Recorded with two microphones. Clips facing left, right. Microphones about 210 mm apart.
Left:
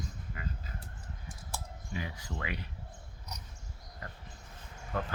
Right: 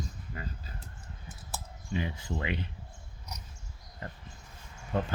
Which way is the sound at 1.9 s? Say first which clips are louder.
Right 6 dB; 25° right (ahead or behind).